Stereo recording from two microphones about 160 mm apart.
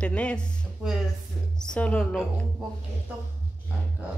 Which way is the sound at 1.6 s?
5° left (ahead or behind).